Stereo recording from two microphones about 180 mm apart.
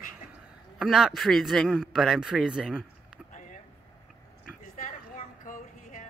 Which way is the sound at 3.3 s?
45° left (ahead or behind).